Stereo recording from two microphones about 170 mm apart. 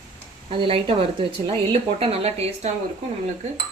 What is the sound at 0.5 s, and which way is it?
Speech, 30° right (ahead or behind).